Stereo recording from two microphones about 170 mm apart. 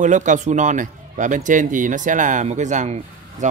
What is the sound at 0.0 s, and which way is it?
A man's voice, 45° right (ahead or behind).